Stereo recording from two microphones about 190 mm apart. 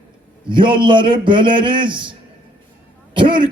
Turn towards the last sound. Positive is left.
turn(degrees=-25)  # may be behind; listen again after turning